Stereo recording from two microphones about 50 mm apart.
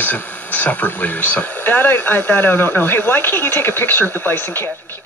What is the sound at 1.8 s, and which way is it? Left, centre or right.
Speech, left.